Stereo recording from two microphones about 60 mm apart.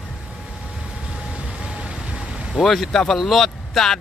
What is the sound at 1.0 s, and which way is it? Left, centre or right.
Vehicle, centre.